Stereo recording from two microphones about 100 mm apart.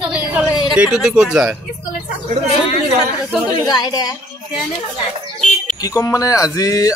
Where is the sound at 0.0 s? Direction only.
10° right (ahead or behind).